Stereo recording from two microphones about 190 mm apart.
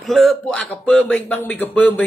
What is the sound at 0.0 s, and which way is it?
Speech, centre (ahead or behind).